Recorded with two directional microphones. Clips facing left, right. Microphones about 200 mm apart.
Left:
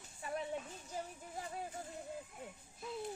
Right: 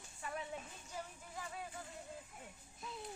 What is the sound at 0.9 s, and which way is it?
Music, 35° left (ahead or behind).